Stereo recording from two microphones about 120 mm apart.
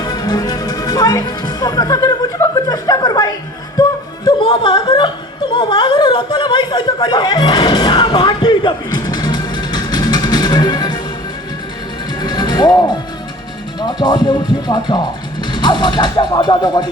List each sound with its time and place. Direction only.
0.0 s speech: 35° left (ahead or behind)
4.4 s speech: 45° left (ahead or behind)
12.2 s music: 35° left (ahead or behind)
13.7 s speech: 35° left (ahead or behind)